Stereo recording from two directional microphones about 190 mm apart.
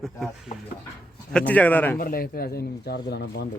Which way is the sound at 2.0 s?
50° left (ahead or behind).